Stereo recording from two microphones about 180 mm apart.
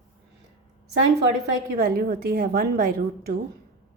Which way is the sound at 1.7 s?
60° right (ahead or behind).